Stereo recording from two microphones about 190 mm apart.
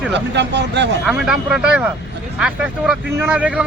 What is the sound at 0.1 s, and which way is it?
Speech, 65° right (ahead or behind).